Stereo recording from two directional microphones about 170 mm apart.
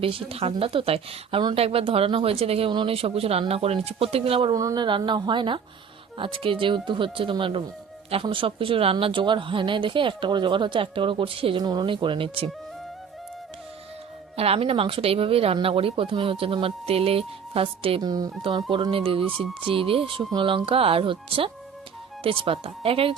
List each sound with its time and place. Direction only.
0.0 s a woman's voice: 35° right (ahead or behind)
14.3 s a woman's voice: 35° right (ahead or behind)